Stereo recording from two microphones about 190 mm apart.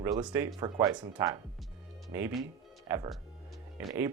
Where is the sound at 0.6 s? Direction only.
25° right (ahead or behind).